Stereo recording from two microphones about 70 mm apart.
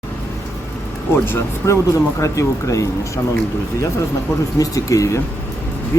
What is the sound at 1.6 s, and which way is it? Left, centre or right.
Speech, left.